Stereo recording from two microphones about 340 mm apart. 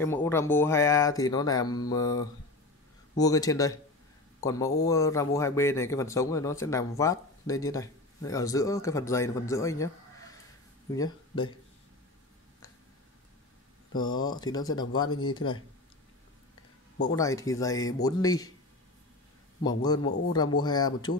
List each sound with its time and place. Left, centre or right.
0.0 s a man's voice: centre
11.0 s speech: centre
13.9 s speech: centre
15.0 s speech: left
15.3 s speech: centre
17.1 s speech: centre
20.6 s speech: centre